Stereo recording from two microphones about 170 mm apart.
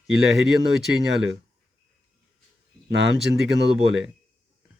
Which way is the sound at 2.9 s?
90° right.